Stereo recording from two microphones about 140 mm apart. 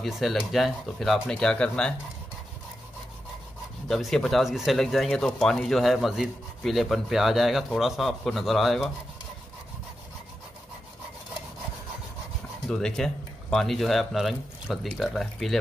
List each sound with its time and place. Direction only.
0.0 s speech: centre (ahead or behind)
3.9 s speech: centre (ahead or behind)
12.6 s speech: 5° left (ahead or behind)